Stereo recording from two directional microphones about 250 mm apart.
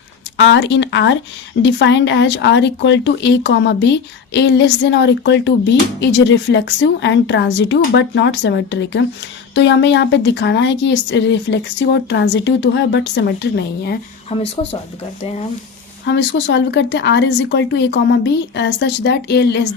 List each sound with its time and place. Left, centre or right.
0.3 s speech: left
14.3 s speech: left
16.0 s speech: left